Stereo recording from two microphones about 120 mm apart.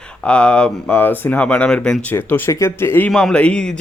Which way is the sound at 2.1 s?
20° left (ahead or behind).